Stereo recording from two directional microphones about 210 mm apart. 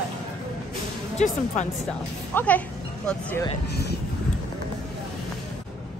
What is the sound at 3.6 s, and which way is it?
Speech, 50° left (ahead or behind).